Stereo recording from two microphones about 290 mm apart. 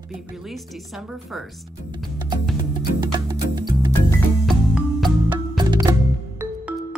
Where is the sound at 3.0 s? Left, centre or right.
Centre.